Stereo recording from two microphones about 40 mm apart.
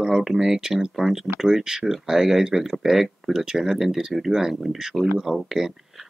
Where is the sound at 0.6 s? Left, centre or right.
Centre.